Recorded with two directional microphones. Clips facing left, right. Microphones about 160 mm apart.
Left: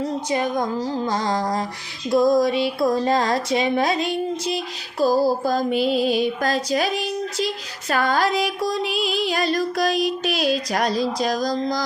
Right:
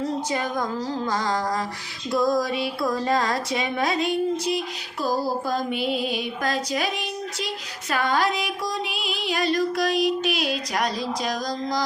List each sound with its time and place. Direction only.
1.0 s music: 20° left (ahead or behind)
2.1 s speech: 20° left (ahead or behind); by 11.8 s 35° left (ahead or behind)